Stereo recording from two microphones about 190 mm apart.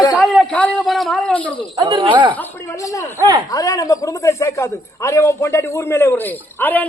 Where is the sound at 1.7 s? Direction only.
25° right (ahead or behind).